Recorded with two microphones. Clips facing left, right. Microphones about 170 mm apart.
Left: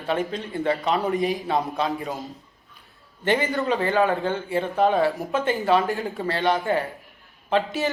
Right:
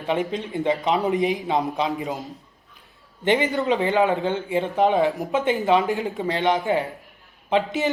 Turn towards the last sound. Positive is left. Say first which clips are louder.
# right 1 dB
turn(degrees=-20)  # may be behind; listen again after turning